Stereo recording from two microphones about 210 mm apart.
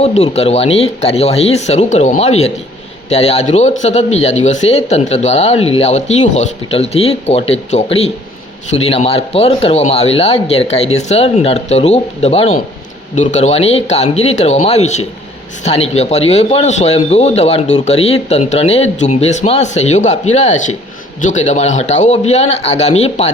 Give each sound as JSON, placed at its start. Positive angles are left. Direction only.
{"t": 0.0, "sound": "speech", "side_deg": 30}